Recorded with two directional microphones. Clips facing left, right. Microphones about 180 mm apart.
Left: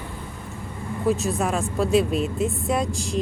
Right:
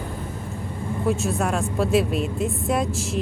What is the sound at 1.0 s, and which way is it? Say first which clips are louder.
Speech: left 1 dB; centre (ahead or behind).